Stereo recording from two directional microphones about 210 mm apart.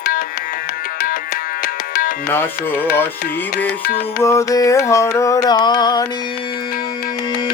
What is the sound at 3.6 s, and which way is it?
Music, 45° left (ahead or behind).